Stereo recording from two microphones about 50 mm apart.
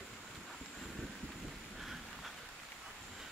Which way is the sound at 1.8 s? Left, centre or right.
Centre.